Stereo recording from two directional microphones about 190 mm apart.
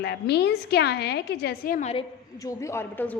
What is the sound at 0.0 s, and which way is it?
A woman's voice, 60° left (ahead or behind).